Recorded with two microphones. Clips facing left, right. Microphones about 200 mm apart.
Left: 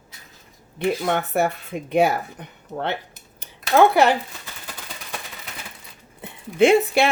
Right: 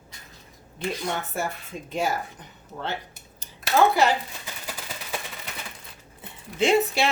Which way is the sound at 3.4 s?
60° left (ahead or behind).